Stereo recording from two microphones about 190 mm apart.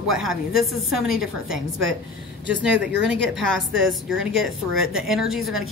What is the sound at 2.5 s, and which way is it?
Speech, 70° right (ahead or behind).